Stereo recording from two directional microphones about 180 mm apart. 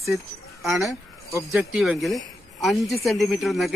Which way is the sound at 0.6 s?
Centre (ahead or behind).